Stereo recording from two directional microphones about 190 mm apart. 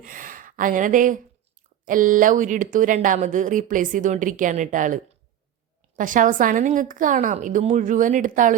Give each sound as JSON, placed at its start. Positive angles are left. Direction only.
{"t": 0.0, "sound": "speech", "side_deg": -45}
{"t": 6.0, "sound": "speech", "side_deg": -45}